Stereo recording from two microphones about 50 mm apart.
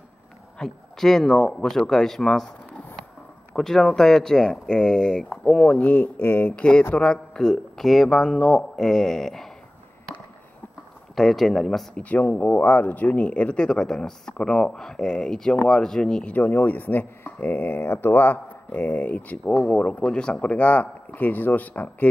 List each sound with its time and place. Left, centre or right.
0.6 s speech: centre
3.5 s speech: centre
5.7 s speech: left
6.2 s speech: left
6.5 s speech: left; by 9.5 s centre
11.1 s speech: centre
11.9 s speech: left
16.3 s speech: left
19.1 s speech: left